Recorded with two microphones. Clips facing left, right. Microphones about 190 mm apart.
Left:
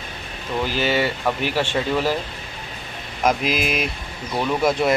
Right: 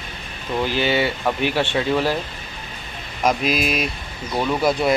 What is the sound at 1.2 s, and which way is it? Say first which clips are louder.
Speech: right 1 dB; 5° left (ahead or behind).